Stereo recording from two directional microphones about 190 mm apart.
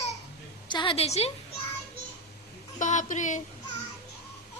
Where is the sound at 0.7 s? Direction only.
25° left (ahead or behind).